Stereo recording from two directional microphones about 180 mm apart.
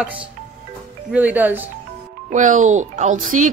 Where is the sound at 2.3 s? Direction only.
45° right (ahead or behind).